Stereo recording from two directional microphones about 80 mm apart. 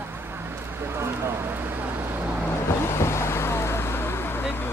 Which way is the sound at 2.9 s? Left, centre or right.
Left.